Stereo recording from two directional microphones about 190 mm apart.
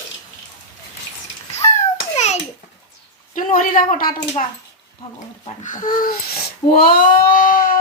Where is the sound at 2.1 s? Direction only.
35° left (ahead or behind).